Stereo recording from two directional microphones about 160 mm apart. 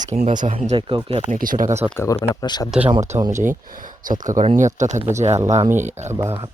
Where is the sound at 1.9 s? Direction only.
15° left (ahead or behind).